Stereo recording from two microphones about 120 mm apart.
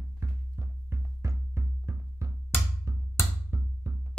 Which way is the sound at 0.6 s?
25° right (ahead or behind).